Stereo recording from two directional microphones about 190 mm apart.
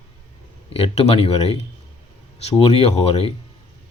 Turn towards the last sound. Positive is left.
turn(degrees=30)  # may be behind; listen again after turning